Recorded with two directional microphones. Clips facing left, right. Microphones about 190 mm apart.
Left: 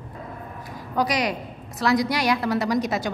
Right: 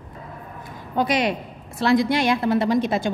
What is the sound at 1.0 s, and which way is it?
A woman's voice, 25° right (ahead or behind).